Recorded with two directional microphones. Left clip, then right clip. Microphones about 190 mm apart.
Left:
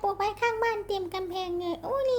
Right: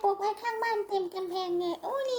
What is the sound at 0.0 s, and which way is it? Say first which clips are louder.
A child's voice: left 1 dB; 35° left (ahead or behind).